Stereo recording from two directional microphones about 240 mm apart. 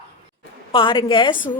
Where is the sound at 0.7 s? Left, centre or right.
Left.